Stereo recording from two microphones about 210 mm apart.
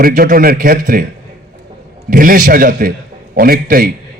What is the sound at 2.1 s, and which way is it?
A man's voice, 40° right (ahead or behind).